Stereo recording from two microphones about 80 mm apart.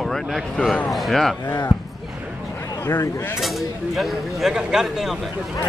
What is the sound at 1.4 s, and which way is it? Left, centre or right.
Speech, left.